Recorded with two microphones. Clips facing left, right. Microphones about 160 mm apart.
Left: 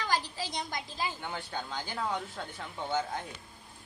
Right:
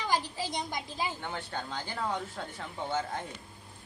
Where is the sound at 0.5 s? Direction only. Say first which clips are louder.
Right 2 dB; 20° right (ahead or behind).